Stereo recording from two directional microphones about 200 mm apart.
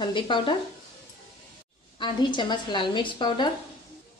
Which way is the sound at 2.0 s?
25° left (ahead or behind).